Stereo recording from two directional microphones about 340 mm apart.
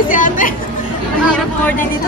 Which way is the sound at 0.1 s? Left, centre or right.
Left.